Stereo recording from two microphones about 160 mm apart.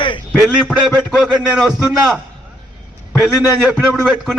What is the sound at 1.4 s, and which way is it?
Speech, centre (ahead or behind).